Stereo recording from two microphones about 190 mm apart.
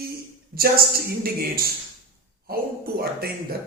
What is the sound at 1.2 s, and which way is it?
Speech, 55° right (ahead or behind).